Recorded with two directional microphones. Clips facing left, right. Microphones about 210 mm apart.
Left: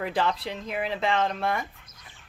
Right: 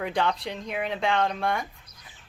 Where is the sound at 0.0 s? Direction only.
Centre (ahead or behind).